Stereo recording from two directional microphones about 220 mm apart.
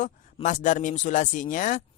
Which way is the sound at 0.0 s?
35° left (ahead or behind).